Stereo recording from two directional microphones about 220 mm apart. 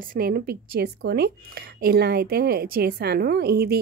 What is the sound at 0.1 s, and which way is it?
A woman's voice, 45° right (ahead or behind).